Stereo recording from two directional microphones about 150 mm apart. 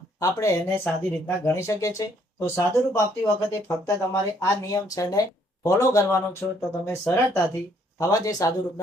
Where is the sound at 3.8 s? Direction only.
20° left (ahead or behind).